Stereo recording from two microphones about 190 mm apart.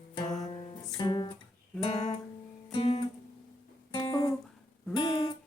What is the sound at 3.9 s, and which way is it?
Music, 20° left (ahead or behind).